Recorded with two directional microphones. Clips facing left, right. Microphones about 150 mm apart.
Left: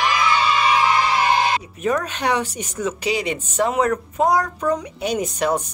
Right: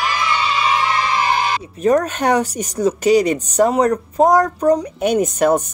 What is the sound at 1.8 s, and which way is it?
Speech, 40° right (ahead or behind).